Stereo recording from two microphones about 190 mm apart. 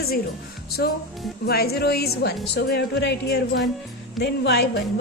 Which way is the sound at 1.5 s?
55° left (ahead or behind).